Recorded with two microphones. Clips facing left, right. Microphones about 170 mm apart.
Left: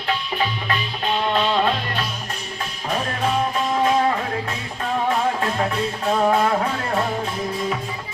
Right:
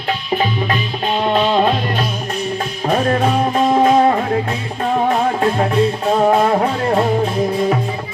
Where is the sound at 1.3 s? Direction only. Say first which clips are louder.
Right 6 dB; 25° right (ahead or behind).